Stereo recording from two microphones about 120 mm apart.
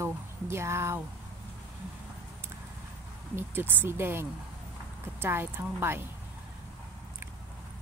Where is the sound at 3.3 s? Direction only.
15° right (ahead or behind).